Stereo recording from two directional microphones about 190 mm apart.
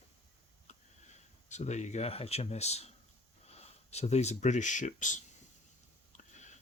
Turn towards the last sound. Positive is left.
turn(degrees=40)  # may be behind; listen again after turning